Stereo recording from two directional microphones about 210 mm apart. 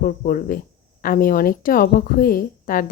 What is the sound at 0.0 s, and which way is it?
Speech, 40° left (ahead or behind).